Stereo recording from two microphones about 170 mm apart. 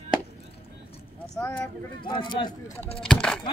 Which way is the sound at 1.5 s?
30° left (ahead or behind).